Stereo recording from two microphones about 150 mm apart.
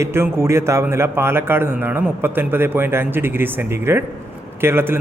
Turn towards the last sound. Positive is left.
turn(degrees=-15)  # may be behind; listen again after turning